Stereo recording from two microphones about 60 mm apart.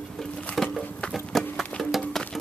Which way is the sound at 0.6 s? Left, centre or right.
Centre.